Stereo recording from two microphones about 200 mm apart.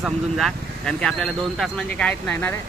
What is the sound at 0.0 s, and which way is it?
Speech, centre (ahead or behind).